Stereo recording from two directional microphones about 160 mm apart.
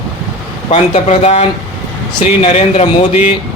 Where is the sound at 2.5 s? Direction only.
45° left (ahead or behind).